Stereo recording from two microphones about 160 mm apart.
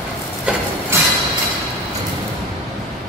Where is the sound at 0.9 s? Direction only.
15° right (ahead or behind).